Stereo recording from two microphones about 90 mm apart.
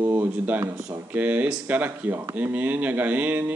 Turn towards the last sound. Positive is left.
turn(degrees=-20)  # may be behind; listen again after turning